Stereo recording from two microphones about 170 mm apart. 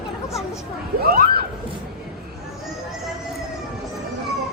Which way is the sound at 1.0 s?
65° right (ahead or behind).